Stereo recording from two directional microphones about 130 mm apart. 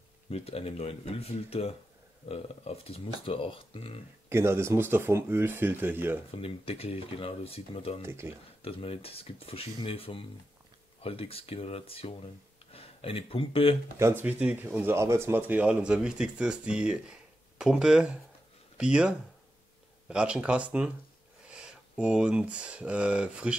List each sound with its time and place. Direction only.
0.3 s speech: 50° left (ahead or behind)
4.3 s speech: 20° right (ahead or behind)
6.3 s speech: 45° left (ahead or behind)
8.0 s speech: 20° right (ahead or behind)
8.6 s speech: 45° left (ahead or behind)
13.9 s speech: 20° right (ahead or behind)